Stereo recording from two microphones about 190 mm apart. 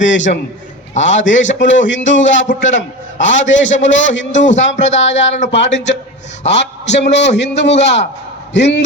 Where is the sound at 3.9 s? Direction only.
75° left (ahead or behind).